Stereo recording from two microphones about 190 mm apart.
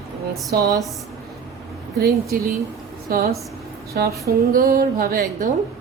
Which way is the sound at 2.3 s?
50° right (ahead or behind).